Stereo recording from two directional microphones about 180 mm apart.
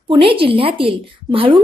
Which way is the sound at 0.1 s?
30° right (ahead or behind).